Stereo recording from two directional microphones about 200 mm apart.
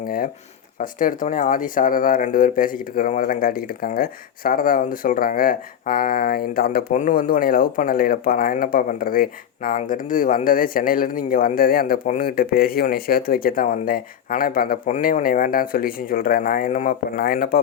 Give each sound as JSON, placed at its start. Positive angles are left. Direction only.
{"t": 0.8, "sound": "speech", "side_deg": 40}